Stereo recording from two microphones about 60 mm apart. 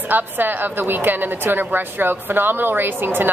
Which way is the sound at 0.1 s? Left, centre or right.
Right.